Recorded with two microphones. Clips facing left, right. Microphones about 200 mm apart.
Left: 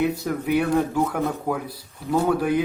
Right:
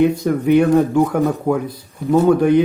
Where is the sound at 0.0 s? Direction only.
10° left (ahead or behind).